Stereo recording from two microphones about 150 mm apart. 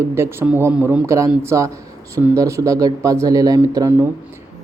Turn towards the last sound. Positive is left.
turn(degrees=-15)  # may be behind; listen again after turning